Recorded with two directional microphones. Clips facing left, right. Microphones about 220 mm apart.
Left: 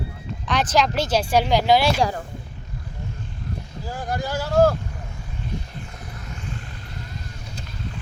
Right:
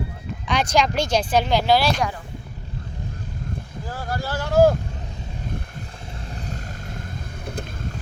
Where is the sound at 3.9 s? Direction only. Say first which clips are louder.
Left 2 dB; 15° left (ahead or behind).